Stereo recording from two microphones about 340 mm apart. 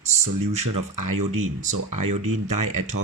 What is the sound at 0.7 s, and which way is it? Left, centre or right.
Speech, right.